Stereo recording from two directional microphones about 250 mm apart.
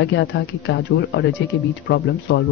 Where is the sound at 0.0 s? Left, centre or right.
Left.